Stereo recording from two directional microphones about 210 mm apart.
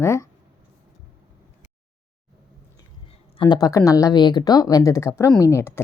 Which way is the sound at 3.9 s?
15° left (ahead or behind).